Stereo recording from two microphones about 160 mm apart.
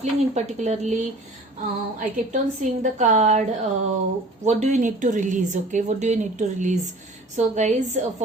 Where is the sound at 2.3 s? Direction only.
50° right (ahead or behind).